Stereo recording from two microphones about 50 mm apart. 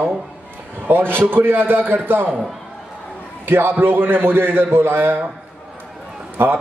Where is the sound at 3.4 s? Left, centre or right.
Right.